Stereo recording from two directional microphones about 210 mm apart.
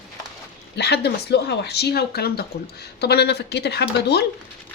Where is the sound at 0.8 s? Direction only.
50° left (ahead or behind).